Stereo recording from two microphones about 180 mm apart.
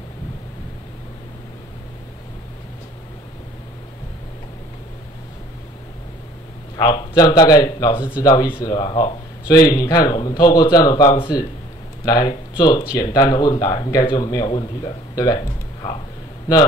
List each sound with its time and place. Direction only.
6.8 s speech: 25° left (ahead or behind)